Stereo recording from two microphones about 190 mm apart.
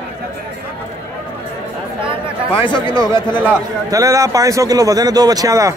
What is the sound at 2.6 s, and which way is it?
Speech, 25° left (ahead or behind).